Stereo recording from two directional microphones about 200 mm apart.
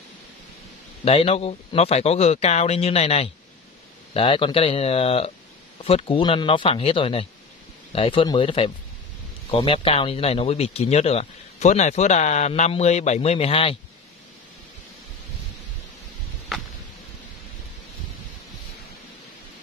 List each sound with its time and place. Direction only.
1.0 s speech: 30° left (ahead or behind)